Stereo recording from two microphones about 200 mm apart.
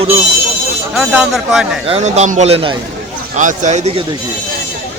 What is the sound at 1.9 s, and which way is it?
A man's voice, 35° right (ahead or behind).